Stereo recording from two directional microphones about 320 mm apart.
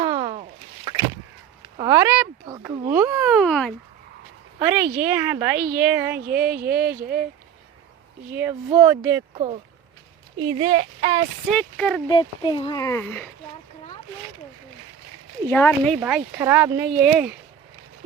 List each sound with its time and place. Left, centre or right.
0.0 s a sound: centre
1.8 s speech: centre
5.5 s speech: right
5.9 s speech: centre
6.8 s speech: right
8.3 s speech: centre
11.5 s speech: centre
12.1 s speech: centre
15.4 s speech: centre
16.0 s speech: centre